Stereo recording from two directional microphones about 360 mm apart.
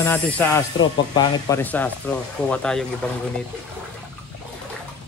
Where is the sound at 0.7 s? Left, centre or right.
Left.